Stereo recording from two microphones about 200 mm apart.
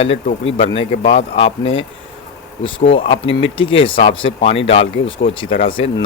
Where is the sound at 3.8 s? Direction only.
25° left (ahead or behind).